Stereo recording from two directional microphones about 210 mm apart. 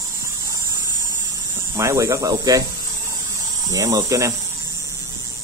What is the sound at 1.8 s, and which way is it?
Speech, 15° right (ahead or behind).